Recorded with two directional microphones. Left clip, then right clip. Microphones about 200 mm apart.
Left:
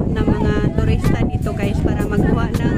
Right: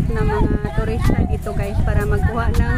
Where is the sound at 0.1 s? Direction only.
5° left (ahead or behind).